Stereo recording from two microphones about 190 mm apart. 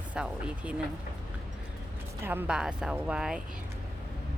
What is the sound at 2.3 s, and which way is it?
Speech, 10° right (ahead or behind).